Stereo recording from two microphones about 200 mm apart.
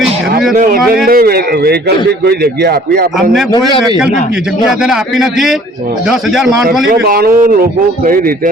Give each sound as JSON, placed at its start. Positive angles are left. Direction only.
{"t": 0.5, "sound": "a man's voice", "side_deg": -40}
{"t": 4.8, "sound": "a man's voice", "side_deg": 0}
{"t": 6.8, "sound": "a man's voice", "side_deg": -50}